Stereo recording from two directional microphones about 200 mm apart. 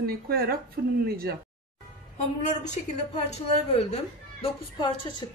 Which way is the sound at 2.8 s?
40° left (ahead or behind).